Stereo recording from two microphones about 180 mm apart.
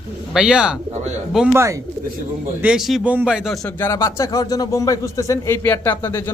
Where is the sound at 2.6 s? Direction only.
5° right (ahead or behind); by 6.3 s 15° left (ahead or behind).